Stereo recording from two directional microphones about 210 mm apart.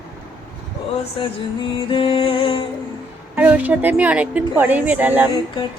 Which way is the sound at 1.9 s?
25° left (ahead or behind).